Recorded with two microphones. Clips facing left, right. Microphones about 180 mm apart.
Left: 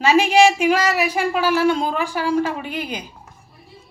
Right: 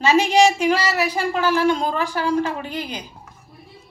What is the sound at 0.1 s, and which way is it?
Speech, 10° left (ahead or behind).